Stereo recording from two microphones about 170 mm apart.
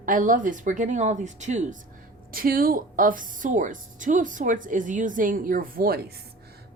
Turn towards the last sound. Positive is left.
turn(degrees=-60)  # may be behind; listen again after turning